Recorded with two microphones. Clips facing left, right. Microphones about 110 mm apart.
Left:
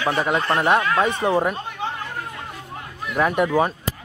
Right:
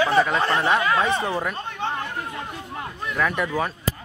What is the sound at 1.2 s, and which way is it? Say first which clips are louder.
Speech: left 6 dB; 30° left (ahead or behind).